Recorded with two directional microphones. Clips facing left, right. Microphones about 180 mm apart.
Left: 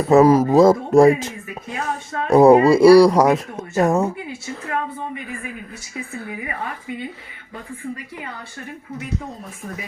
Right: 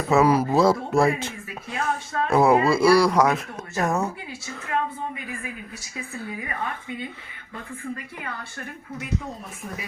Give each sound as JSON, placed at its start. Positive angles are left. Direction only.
{"t": 0.1, "sound": "speech", "side_deg": 45}